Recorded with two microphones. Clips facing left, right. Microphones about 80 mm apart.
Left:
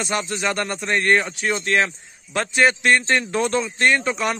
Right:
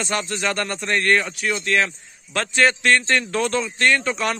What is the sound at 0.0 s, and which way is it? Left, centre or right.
Speech, centre.